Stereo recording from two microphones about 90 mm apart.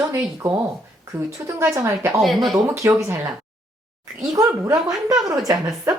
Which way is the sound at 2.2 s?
Centre (ahead or behind).